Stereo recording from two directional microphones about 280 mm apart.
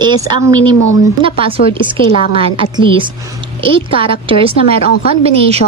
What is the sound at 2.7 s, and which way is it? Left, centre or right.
A woman's voice, centre.